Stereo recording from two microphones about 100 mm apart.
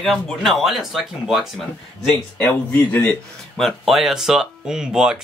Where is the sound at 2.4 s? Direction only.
20° left (ahead or behind).